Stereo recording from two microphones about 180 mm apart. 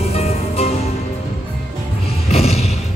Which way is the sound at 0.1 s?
35° left (ahead or behind).